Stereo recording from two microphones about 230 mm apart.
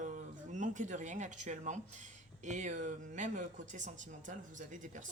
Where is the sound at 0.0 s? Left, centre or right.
Right.